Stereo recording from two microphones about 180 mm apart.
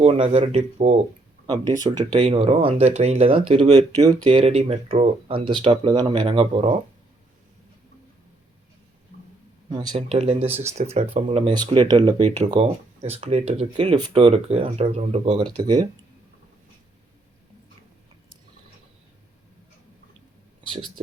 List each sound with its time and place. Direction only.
0.0 s speech: 35° right (ahead or behind)
1.5 s speech: 20° right (ahead or behind)
2.1 s speech: 35° right (ahead or behind)
4.3 s speech: 35° right (ahead or behind)
9.6 s speech: 25° right (ahead or behind)
9.9 s speech: 35° right (ahead or behind)
15.5 s speech: 20° right (ahead or behind)